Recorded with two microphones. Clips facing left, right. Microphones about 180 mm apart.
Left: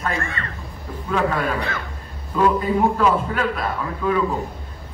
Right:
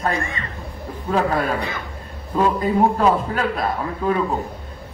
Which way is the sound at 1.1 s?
35° right (ahead or behind).